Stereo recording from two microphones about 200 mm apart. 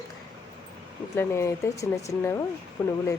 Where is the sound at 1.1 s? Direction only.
15° left (ahead or behind).